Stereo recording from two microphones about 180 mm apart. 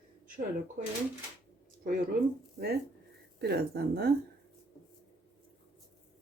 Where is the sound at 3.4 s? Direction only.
65° right (ahead or behind).